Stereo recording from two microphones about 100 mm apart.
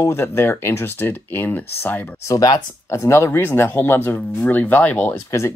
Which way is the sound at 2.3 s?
35° left (ahead or behind).